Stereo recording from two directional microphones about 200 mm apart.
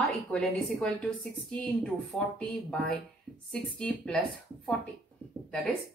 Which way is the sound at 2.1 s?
Centre (ahead or behind).